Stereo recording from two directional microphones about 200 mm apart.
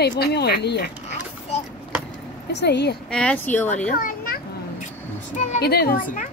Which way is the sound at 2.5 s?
55° left (ahead or behind).